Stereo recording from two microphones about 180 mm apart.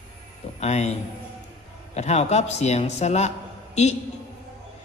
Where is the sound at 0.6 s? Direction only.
40° left (ahead or behind).